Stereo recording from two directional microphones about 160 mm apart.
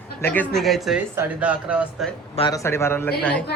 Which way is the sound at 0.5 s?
Centre (ahead or behind).